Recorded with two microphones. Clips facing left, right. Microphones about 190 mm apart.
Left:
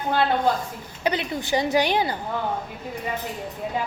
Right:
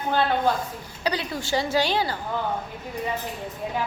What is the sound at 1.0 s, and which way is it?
A woman's voice, 20° left (ahead or behind).